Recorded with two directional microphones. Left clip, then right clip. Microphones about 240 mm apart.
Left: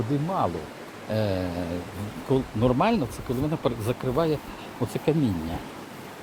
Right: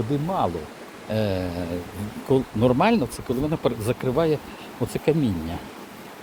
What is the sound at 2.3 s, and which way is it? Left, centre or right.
Speech, right.